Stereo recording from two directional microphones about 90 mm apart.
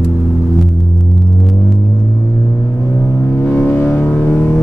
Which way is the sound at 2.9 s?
15° left (ahead or behind).